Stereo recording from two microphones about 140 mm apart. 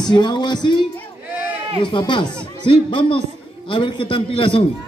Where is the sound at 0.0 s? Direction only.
30° left (ahead or behind).